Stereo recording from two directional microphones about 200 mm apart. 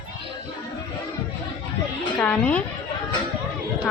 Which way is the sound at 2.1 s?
5° left (ahead or behind).